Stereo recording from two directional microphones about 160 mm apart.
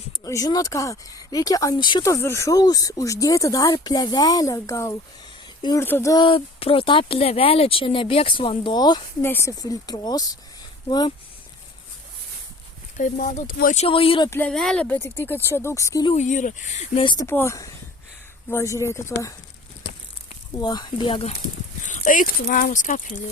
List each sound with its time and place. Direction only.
0.3 s speech: 20° left (ahead or behind)
2.0 s speech: 15° left (ahead or behind)
9.2 s speech: 15° left (ahead or behind)
13.0 s speech: 55° left (ahead or behind)
13.7 s speech: 35° left (ahead or behind)
14.3 s speech: 15° left (ahead or behind)
16.1 s speech: 50° left (ahead or behind)
17.0 s speech: 30° left (ahead or behind)
17.2 s speech: 15° left (ahead or behind)
20.6 s speech: 25° left (ahead or behind)
21.8 s speech: 55° left (ahead or behind)